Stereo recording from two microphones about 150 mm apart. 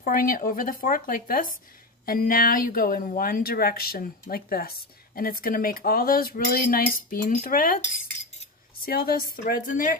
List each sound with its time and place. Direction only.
0.0 s speech: 75° left (ahead or behind)
8.8 s speech: 80° left